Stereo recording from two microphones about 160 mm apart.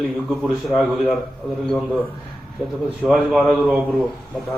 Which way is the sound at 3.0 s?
Centre (ahead or behind).